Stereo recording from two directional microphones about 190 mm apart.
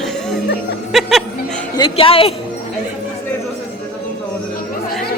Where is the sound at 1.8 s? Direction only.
30° left (ahead or behind).